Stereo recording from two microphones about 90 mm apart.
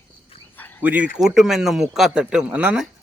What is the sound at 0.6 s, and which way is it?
Cricket, 20° left (ahead or behind).